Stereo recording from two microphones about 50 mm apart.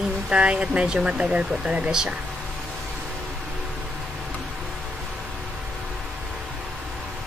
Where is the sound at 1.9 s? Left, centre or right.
Centre.